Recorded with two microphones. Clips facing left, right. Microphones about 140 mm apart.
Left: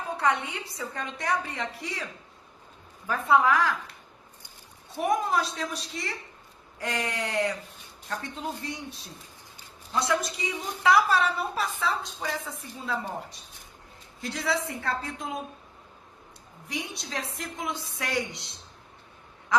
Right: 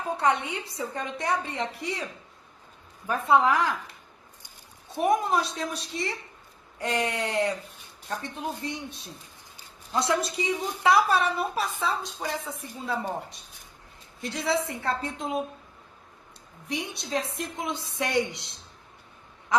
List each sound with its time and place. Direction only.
0.2 s a woman's voice: 20° right (ahead or behind)
3.1 s a woman's voice: 25° right (ahead or behind)
4.9 s a woman's voice: 25° right (ahead or behind)
16.6 s a woman's voice: 25° right (ahead or behind)